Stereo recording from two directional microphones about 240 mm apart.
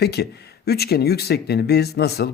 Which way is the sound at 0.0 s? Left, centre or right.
Left.